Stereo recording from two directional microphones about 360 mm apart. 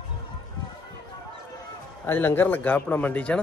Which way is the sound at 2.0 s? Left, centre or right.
Centre.